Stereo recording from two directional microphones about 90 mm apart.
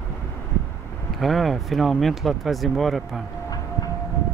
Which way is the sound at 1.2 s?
Centre (ahead or behind).